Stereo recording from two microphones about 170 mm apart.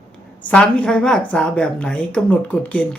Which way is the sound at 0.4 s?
5° left (ahead or behind).